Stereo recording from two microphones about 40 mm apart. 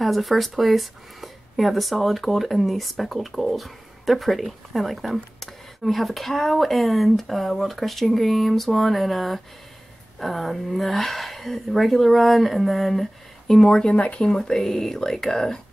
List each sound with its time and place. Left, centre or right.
0.0 s speech: centre
13.9 s speech: left
14.3 s speech: centre